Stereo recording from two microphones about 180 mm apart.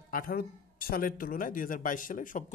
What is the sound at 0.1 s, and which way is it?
Speech, 50° left (ahead or behind).